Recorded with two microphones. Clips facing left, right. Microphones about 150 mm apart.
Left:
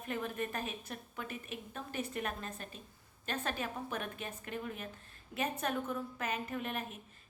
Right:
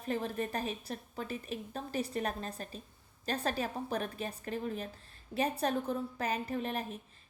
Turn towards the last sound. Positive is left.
turn(degrees=-35)  # may be behind; listen again after turning